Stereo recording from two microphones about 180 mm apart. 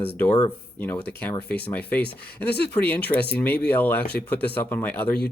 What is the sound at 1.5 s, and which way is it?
Speech, 10° left (ahead or behind).